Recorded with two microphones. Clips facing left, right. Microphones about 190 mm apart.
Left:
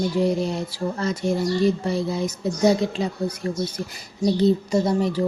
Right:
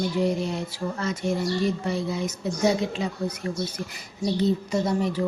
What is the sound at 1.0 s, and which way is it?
Speech, 35° left (ahead or behind).